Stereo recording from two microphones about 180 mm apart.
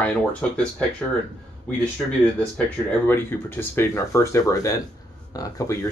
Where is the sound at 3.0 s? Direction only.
10° left (ahead or behind).